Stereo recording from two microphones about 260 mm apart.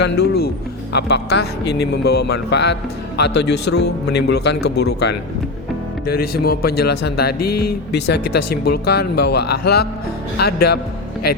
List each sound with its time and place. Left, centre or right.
0.0 s speech: left